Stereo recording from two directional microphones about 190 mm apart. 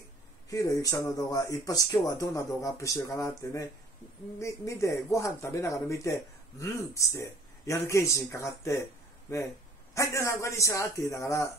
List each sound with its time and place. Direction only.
0.5 s speech: 15° left (ahead or behind)